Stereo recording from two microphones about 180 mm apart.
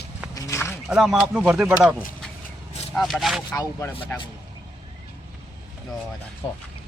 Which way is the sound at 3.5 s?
15° left (ahead or behind).